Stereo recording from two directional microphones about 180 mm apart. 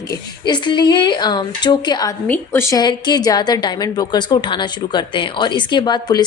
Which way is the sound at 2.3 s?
15° left (ahead or behind).